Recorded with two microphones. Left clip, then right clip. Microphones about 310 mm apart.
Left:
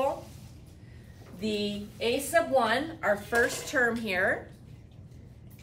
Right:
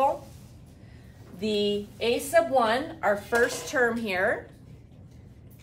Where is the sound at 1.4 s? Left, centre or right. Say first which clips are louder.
Right 6 dB; centre.